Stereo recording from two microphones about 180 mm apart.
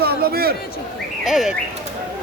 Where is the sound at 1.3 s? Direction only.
Centre (ahead or behind).